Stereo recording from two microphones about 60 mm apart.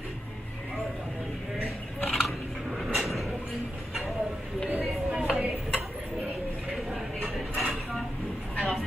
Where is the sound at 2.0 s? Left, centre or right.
Centre.